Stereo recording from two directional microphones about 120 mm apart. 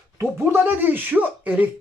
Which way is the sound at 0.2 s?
20° right (ahead or behind).